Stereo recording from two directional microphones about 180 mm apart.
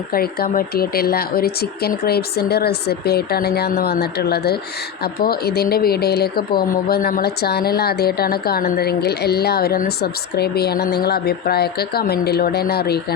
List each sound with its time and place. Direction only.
0.1 s speech: 55° left (ahead or behind)